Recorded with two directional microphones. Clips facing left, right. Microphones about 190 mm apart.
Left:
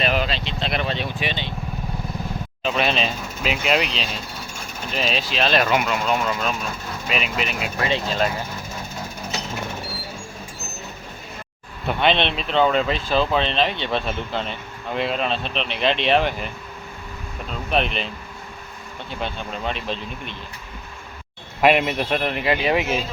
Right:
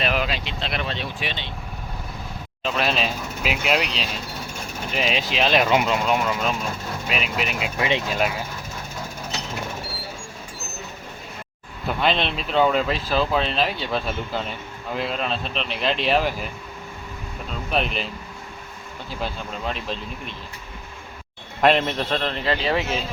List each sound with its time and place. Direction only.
0.0 s vehicle: centre (ahead or behind)
0.6 s speech: centre (ahead or behind)
2.6 s speech: centre (ahead or behind)
4.9 s speech: 15° right (ahead or behind)
7.1 s speech: 5° right (ahead or behind)
7.6 s speech: 20° right (ahead or behind)
11.9 s speech: centre (ahead or behind)
17.7 s speech: centre (ahead or behind)
19.2 s speech: centre (ahead or behind)
21.6 s a man's voice: 10° left (ahead or behind)